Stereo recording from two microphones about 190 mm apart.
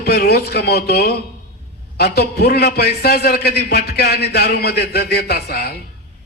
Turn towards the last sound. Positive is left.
turn(degrees=55)  # may be behind; listen again after turning